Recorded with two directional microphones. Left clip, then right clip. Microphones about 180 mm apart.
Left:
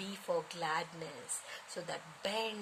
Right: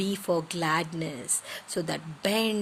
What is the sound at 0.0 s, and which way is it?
Speech, 40° right (ahead or behind).